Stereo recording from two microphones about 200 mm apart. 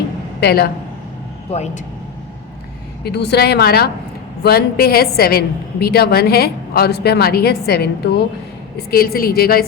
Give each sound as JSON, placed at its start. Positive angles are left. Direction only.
{"t": 0.3, "sound": "speech", "side_deg": 55}
{"t": 1.5, "sound": "speech", "side_deg": 35}
{"t": 3.0, "sound": "a woman's voice", "side_deg": 55}